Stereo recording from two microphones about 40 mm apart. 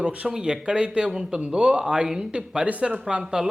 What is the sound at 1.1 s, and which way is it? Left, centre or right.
Speech, centre.